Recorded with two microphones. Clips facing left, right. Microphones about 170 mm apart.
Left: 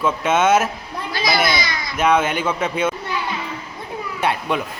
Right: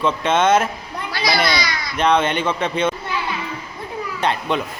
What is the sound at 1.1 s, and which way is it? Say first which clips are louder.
Speech: even; 20° left (ahead or behind).